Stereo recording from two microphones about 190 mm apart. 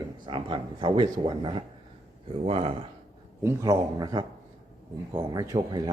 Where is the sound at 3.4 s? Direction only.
20° right (ahead or behind).